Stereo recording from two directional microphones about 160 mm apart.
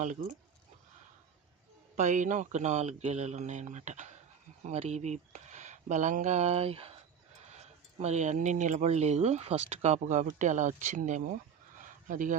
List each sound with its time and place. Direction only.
0.0 s speech: 50° right (ahead or behind)
2.0 s speech: 50° right (ahead or behind)